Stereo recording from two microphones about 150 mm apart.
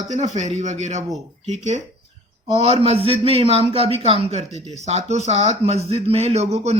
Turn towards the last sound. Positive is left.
turn(degrees=-45)  # may be behind; listen again after turning